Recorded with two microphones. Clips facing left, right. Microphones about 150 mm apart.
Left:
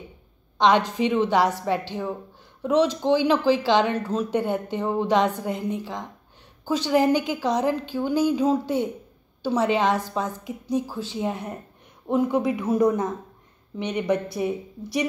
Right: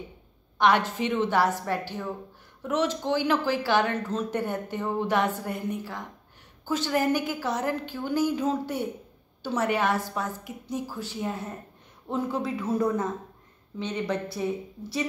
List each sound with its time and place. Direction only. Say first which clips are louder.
0.6 s speech: left 3 dB; 20° left (ahead or behind)